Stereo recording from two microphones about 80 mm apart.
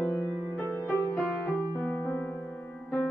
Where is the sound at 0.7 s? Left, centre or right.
Centre.